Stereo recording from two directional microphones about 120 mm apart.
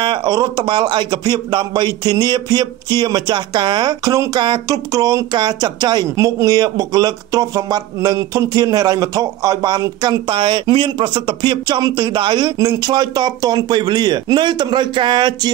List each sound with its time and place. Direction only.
0.0 s a man's voice: 40° right (ahead or behind)